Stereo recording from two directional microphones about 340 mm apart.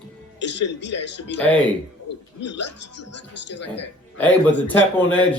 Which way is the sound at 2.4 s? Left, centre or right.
Left.